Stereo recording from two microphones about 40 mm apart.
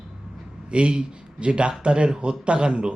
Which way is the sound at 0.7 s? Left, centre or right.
Right.